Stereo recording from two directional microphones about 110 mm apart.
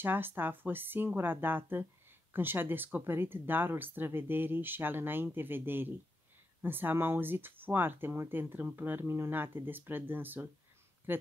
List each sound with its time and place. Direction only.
0.0 s speech: 20° right (ahead or behind)